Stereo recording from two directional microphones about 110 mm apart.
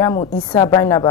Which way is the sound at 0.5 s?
40° left (ahead or behind).